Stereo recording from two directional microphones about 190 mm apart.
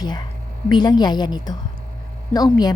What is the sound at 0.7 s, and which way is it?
A woman's voice, 20° left (ahead or behind).